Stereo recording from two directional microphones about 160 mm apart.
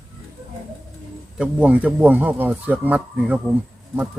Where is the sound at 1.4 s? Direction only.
10° right (ahead or behind).